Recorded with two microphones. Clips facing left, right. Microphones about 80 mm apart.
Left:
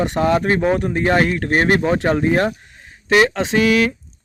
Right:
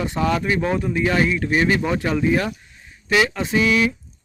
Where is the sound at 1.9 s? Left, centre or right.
Left.